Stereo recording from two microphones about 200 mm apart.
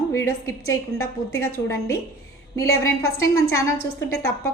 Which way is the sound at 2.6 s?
15° left (ahead or behind).